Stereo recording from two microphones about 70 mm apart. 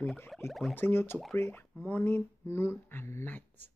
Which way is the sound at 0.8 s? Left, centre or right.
Left.